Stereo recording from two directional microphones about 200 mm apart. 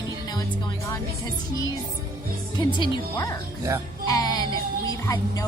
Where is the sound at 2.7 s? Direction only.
20° left (ahead or behind).